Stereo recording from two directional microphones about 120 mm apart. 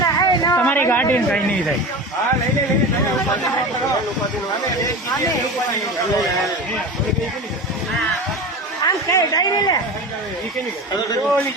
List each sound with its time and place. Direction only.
0.0 s a sound: 35° left (ahead or behind)
0.6 s speech: 15° left (ahead or behind)
8.8 s a man's voice: 30° left (ahead or behind)